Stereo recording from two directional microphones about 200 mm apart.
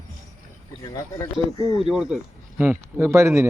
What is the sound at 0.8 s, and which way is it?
Speech, 20° left (ahead or behind).